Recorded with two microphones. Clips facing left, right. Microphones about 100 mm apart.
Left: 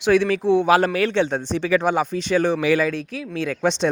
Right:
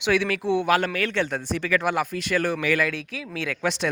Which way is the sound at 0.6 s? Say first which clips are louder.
Left 5 dB; 35° left (ahead or behind).